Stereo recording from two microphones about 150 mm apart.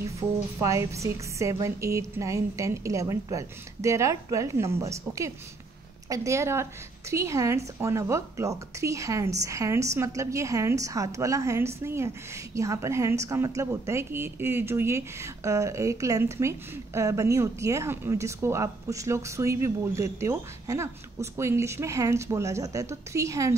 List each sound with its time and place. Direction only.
0.6 s a woman's voice: 20° right (ahead or behind)